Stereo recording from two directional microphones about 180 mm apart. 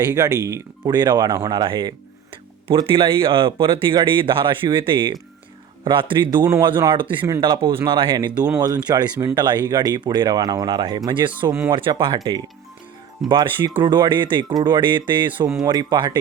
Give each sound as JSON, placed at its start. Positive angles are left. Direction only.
{"t": 0.0, "sound": "speech", "side_deg": -20}
{"t": 7.2, "sound": "speech", "side_deg": -15}
{"t": 7.4, "sound": "speech", "side_deg": -30}
{"t": 11.3, "sound": "speech", "side_deg": -15}
{"t": 11.7, "sound": "speech", "side_deg": -25}